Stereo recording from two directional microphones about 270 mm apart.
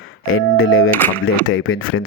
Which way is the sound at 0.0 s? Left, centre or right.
Left.